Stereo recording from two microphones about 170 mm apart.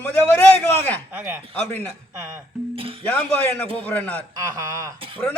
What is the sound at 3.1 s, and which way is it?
A man's voice, 5° left (ahead or behind).